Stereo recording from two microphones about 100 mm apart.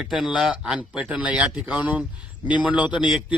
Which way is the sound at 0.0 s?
5° right (ahead or behind).